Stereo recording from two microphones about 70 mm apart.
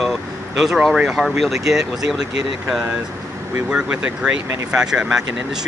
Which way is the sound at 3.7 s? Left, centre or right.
Centre.